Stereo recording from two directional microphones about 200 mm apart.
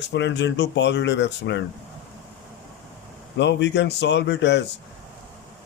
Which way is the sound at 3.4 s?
60° left (ahead or behind).